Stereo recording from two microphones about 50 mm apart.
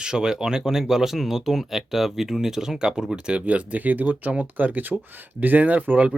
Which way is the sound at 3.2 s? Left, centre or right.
Right.